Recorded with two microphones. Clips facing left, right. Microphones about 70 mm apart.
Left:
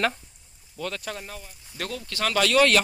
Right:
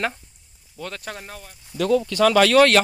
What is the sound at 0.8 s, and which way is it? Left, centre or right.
Speech, right.